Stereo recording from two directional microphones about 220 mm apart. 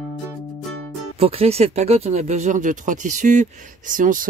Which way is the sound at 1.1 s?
30° right (ahead or behind).